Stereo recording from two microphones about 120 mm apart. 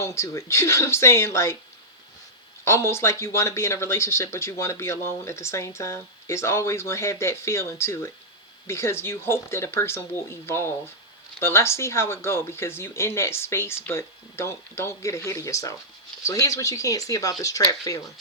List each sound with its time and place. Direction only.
0.0 s speech: 25° left (ahead or behind)
2.6 s speech: 20° left (ahead or behind)